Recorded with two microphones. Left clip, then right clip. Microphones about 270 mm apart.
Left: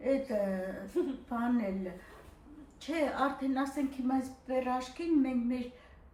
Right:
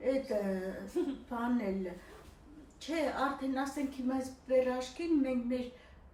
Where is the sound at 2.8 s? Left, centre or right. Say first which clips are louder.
Left 2 dB; centre.